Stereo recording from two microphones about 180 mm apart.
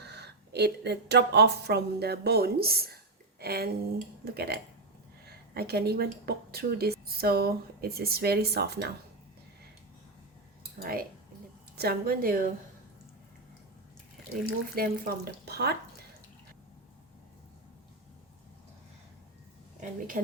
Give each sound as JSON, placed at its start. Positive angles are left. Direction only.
{"t": 0.0, "sound": "speech", "side_deg": -65}
{"t": 10.8, "sound": "speech", "side_deg": -55}
{"t": 14.8, "sound": "speech", "side_deg": -55}